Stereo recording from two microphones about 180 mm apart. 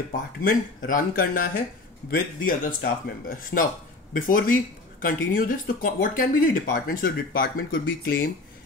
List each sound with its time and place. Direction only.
0.4 s speech: 50° left (ahead or behind)